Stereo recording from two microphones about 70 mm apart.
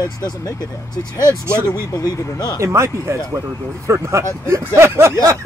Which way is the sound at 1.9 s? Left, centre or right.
Left.